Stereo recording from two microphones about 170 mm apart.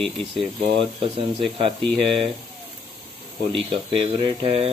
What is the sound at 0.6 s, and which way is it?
Speech, 30° right (ahead or behind).